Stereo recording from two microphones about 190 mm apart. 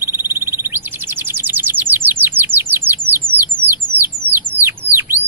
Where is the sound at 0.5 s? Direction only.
10° right (ahead or behind).